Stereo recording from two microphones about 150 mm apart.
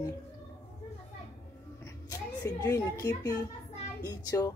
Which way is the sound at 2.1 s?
20° left (ahead or behind).